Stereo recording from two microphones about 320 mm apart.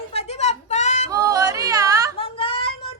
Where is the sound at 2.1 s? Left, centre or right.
Centre.